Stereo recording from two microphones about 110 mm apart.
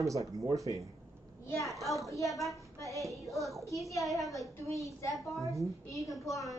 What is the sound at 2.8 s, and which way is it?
Child singing, 30° left (ahead or behind).